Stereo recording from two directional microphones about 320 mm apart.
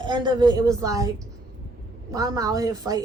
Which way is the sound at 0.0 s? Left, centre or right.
Centre.